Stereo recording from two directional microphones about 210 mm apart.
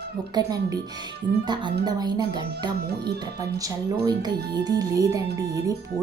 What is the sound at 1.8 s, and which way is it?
Music, 20° right (ahead or behind).